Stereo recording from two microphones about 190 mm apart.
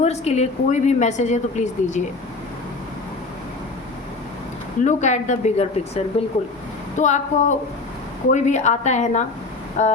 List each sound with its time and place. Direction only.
0.0 s a woman's voice: 35° left (ahead or behind)
4.8 s a woman's voice: 40° left (ahead or behind)